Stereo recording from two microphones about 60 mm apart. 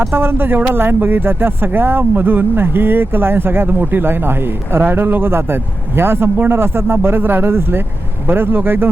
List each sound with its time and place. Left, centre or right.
0.0 s speech: right